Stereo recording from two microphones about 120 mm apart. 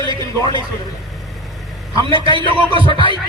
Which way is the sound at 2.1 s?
40° right (ahead or behind).